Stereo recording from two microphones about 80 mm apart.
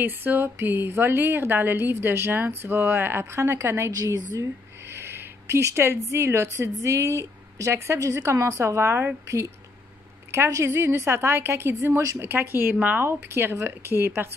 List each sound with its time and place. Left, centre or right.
0.0 s speech: right
3.9 s a woman's voice: right
4.8 s a woman's voice: right
13.0 s a woman's voice: right